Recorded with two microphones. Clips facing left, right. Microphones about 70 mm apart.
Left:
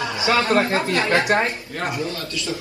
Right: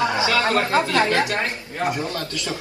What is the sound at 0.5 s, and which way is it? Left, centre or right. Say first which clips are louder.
A man's voice: even; left.